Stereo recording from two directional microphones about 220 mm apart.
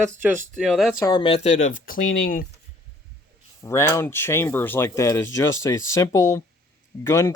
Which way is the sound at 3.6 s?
15° left (ahead or behind).